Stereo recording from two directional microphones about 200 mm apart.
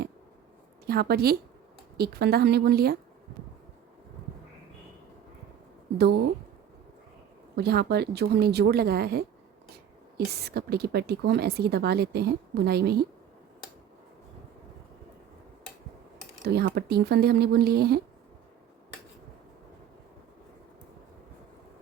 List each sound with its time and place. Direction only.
0.9 s a woman's voice: 50° right (ahead or behind)
7.5 s a woman's voice: 55° right (ahead or behind)
16.5 s a woman's voice: 50° right (ahead or behind)